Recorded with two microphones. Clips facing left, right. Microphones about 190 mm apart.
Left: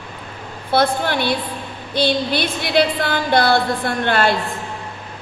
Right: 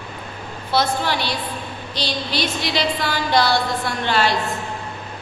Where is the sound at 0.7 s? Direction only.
55° left (ahead or behind).